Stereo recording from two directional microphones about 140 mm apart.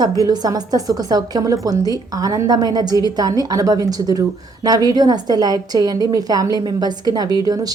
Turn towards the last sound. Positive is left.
turn(degrees=-30)  # may be behind; listen again after turning